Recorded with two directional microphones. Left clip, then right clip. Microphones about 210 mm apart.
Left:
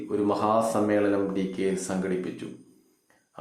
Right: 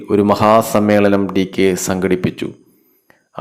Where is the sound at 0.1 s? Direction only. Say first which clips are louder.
Right 13 dB; 40° right (ahead or behind).